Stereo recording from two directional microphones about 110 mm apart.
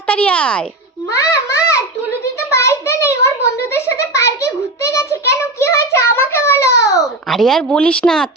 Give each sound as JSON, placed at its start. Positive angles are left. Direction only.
{"t": 0.1, "sound": "speech", "side_deg": 10}
{"t": 1.1, "sound": "a child's voice", "side_deg": 25}
{"t": 2.5, "sound": "a sound", "side_deg": 25}
{"t": 7.0, "sound": "a woman's voice", "side_deg": 0}